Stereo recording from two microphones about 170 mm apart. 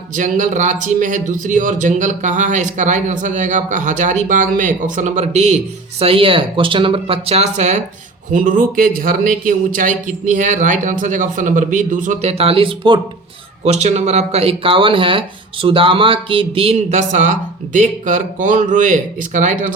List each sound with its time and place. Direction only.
0.2 s speech: 50° right (ahead or behind)
8.3 s speech: 55° right (ahead or behind); by 13.0 s 30° right (ahead or behind)
13.7 s speech: 40° right (ahead or behind)